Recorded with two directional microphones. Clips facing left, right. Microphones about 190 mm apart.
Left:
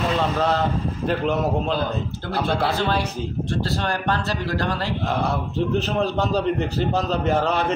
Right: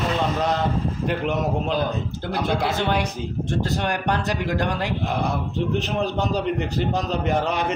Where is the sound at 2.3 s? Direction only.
15° right (ahead or behind).